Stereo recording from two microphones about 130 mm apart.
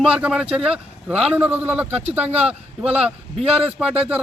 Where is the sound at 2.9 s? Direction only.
50° right (ahead or behind).